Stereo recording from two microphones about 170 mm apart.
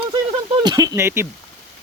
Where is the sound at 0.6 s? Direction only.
25° right (ahead or behind).